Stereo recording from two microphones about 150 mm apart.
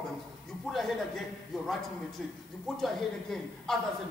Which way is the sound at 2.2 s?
5° left (ahead or behind).